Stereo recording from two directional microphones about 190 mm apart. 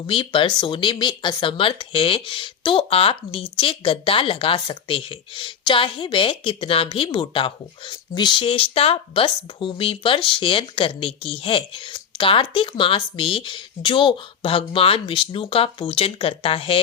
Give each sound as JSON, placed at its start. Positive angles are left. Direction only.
{"t": 0.1, "sound": "speech", "side_deg": 25}